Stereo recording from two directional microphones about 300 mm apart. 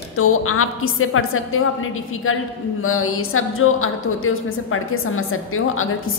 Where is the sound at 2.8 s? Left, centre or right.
Left.